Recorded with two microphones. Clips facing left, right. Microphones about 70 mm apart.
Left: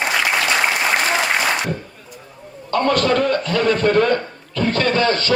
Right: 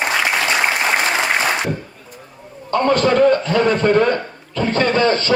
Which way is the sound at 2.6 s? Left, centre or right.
Right.